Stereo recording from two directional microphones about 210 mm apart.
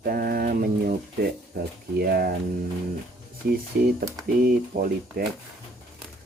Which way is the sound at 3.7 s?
45° right (ahead or behind).